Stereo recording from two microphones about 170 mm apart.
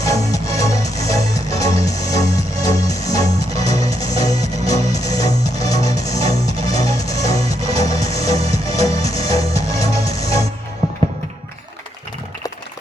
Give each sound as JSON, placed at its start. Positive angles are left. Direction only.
{"t": 0.0, "sound": "music", "side_deg": 20}